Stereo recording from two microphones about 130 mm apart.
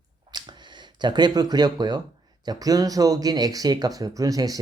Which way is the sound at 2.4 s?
30° right (ahead or behind).